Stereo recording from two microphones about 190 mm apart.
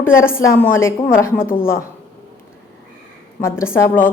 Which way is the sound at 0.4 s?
15° left (ahead or behind).